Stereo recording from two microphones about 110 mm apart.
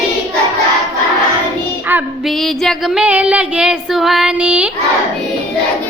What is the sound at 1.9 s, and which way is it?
Female singing, 20° right (ahead or behind).